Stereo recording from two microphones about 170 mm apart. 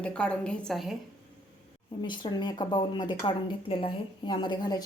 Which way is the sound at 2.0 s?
25° left (ahead or behind).